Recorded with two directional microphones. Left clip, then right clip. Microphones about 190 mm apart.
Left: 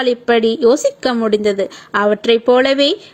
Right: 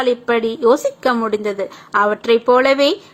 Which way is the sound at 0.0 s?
35° left (ahead or behind).